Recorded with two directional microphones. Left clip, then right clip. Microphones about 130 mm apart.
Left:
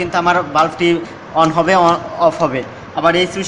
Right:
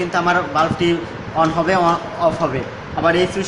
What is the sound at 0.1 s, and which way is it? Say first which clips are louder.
A man's voice: left 4 dB; 50° left (ahead or behind).